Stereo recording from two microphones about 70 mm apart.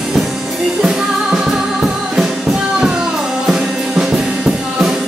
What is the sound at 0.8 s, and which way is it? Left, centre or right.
Music, centre.